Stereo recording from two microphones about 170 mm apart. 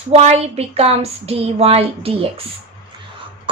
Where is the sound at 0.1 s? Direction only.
35° right (ahead or behind).